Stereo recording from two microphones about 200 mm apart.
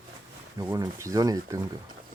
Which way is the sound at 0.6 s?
15° right (ahead or behind).